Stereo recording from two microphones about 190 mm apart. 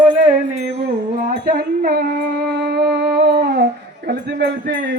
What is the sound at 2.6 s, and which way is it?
Music, 60° right (ahead or behind).